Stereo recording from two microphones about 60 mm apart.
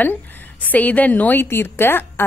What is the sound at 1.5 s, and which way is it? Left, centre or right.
Speech, left.